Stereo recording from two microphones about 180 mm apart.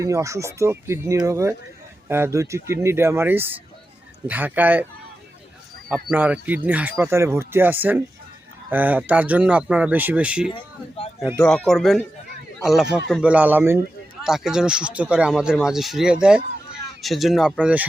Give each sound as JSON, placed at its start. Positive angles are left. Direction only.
{"t": 0.0, "sound": "speech", "side_deg": -15}
{"t": 5.9, "sound": "speech", "side_deg": -5}
{"t": 10.5, "sound": "speech", "side_deg": 30}
{"t": 11.4, "sound": "speech", "side_deg": 5}